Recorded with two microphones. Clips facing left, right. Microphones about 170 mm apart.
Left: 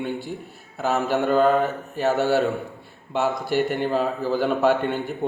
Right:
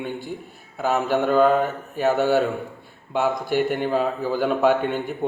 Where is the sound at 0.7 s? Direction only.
5° left (ahead or behind).